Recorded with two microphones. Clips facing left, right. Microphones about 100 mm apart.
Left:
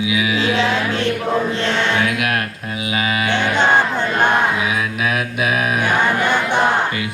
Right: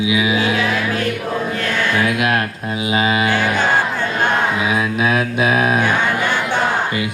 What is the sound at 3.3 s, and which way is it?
Music, 20° left (ahead or behind).